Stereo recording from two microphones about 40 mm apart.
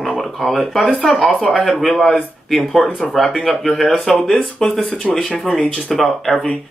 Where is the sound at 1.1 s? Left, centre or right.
Left.